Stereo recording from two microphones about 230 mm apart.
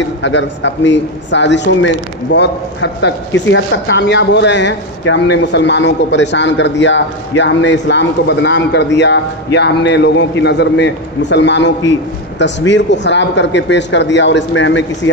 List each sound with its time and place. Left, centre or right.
0.2 s a man's voice: left